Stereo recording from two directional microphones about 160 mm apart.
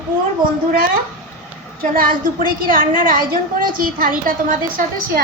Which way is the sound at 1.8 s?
65° right (ahead or behind).